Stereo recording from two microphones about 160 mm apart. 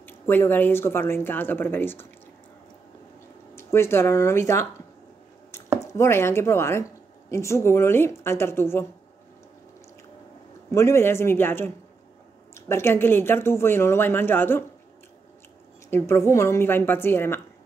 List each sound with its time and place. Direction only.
0.0 s speech: 10° left (ahead or behind)
3.5 s speech: 15° left (ahead or behind)
5.8 s a woman's voice: 20° left (ahead or behind)
10.7 s speech: 15° left (ahead or behind)
15.9 s speech: 15° left (ahead or behind)